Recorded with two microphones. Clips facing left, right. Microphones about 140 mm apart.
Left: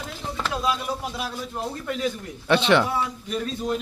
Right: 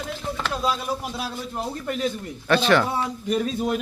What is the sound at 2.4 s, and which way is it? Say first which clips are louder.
Speech: even; 20° left (ahead or behind).